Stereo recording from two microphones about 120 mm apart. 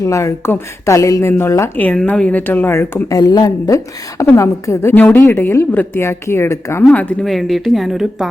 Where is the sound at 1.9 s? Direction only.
10° left (ahead or behind).